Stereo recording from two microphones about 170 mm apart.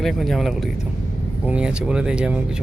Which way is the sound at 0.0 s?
Centre (ahead or behind).